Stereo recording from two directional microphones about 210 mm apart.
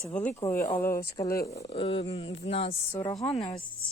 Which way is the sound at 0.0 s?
5° left (ahead or behind).